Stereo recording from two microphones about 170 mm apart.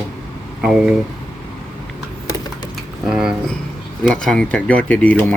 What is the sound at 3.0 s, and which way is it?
Speech, 5° right (ahead or behind).